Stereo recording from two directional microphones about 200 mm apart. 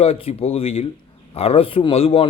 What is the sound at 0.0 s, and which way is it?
A man's voice, 30° left (ahead or behind).